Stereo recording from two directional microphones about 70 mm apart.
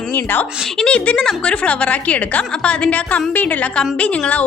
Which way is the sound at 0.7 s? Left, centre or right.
Centre.